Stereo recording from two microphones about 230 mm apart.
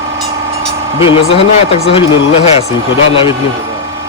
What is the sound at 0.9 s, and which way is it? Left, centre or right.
Speech, left.